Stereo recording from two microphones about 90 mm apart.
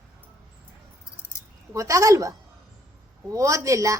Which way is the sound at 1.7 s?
35° right (ahead or behind).